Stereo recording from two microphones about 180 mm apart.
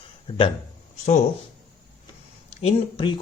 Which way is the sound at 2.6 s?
30° left (ahead or behind).